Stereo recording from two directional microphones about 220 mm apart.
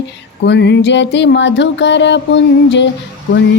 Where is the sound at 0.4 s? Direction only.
50° left (ahead or behind).